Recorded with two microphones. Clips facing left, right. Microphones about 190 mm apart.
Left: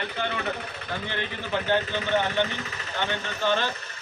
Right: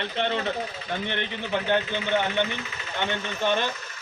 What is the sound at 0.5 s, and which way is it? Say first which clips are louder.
Speech: right 3 dB; 65° left (ahead or behind).